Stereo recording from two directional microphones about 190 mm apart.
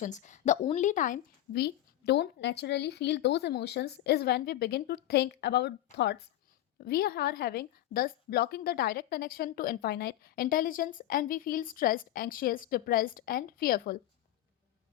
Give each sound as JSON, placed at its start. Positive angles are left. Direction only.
{"t": 0.0, "sound": "a woman's voice", "side_deg": 40}
{"t": 1.5, "sound": "a woman's voice", "side_deg": 60}
{"t": 6.7, "sound": "a woman's voice", "side_deg": 50}